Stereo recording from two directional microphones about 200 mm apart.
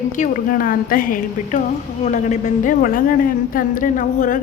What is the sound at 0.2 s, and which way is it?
A woman's voice, 45° left (ahead or behind).